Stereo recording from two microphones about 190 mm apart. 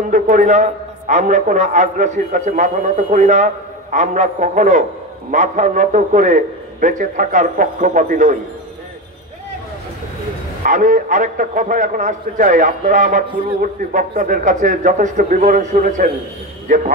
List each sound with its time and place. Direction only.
0.1 s a man's voice: 40° right (ahead or behind)
10.6 s a man's voice: 45° right (ahead or behind)
13.3 s a man's voice: 30° right (ahead or behind)
13.6 s a man's voice: 45° right (ahead or behind)